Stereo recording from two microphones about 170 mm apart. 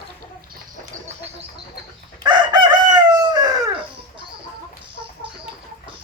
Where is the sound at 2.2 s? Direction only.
25° right (ahead or behind).